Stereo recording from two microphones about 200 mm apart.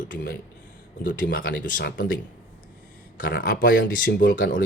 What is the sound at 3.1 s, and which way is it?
Speech, 45° left (ahead or behind).